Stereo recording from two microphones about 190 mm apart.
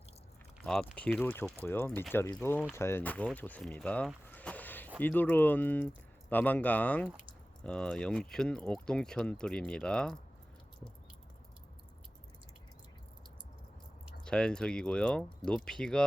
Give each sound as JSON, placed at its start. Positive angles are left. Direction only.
{"t": 0.6, "sound": "speech", "side_deg": 0}
{"t": 14.3, "sound": "speech", "side_deg": 5}